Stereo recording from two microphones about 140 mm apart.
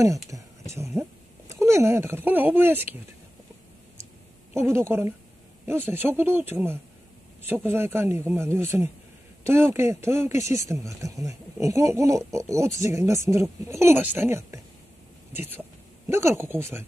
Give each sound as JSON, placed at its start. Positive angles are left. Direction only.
{"t": 0.0, "sound": "speech", "side_deg": -25}
{"t": 4.6, "sound": "speech", "side_deg": -20}